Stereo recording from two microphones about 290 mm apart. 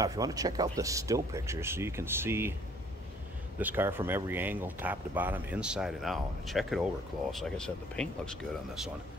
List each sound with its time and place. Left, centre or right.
0.0 s speech: centre
3.5 s speech: centre